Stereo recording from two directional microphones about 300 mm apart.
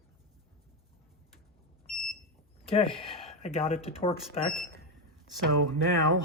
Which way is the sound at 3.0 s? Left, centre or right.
Centre.